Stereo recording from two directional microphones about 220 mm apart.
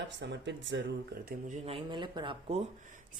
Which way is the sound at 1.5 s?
25° right (ahead or behind).